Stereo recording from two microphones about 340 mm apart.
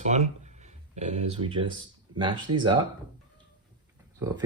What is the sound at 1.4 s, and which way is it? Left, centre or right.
Speech, centre.